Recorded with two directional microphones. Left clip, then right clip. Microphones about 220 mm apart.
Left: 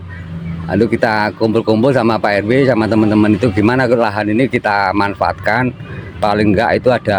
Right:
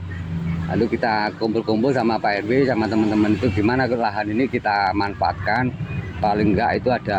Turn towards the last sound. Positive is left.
turn(degrees=55)  # may be behind; listen again after turning